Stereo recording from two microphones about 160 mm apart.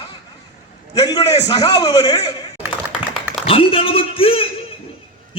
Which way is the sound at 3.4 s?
35° left (ahead or behind).